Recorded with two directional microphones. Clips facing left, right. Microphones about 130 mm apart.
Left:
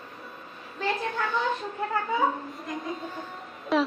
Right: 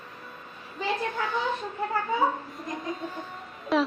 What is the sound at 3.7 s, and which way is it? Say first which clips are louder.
Speech: even; centre (ahead or behind).